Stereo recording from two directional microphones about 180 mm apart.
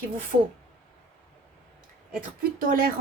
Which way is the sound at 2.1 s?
50° right (ahead or behind).